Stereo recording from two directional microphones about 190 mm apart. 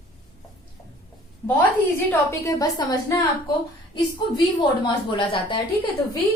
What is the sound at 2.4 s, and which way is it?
Speech, 15° left (ahead or behind).